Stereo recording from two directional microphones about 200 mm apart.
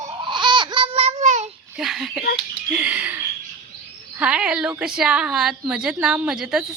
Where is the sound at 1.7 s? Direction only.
Centre (ahead or behind).